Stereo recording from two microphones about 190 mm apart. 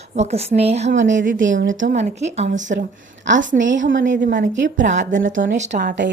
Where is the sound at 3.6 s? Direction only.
75° right (ahead or behind).